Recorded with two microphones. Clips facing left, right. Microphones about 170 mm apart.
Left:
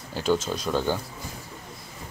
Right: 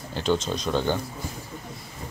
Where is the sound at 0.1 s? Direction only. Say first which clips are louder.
Even; 5° left (ahead or behind).